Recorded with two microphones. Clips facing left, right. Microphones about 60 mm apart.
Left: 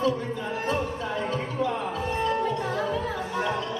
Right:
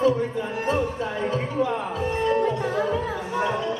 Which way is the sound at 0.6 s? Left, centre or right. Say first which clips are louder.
Right 3 dB; right.